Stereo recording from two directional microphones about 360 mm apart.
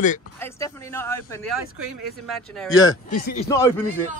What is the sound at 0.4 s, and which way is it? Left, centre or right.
A man's voice, centre.